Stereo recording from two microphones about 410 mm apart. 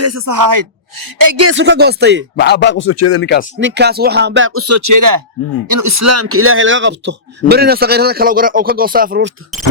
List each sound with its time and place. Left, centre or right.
0.0 s a woman's voice: right
1.5 s speech: right
2.3 s speech: left
3.6 s speech: right